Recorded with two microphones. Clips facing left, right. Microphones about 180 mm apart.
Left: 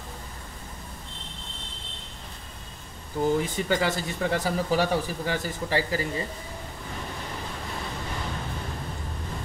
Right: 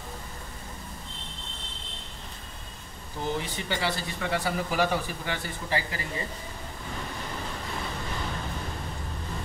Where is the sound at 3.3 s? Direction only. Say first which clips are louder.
Left 6 dB; 45° left (ahead or behind).